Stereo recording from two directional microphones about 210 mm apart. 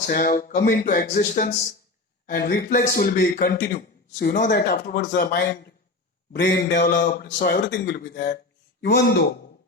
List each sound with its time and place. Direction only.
0.0 s a man's voice: 40° left (ahead or behind)
7.0 s a man's voice: 40° left (ahead or behind)